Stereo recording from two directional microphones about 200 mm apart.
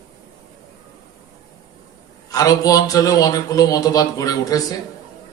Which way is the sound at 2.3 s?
15° left (ahead or behind).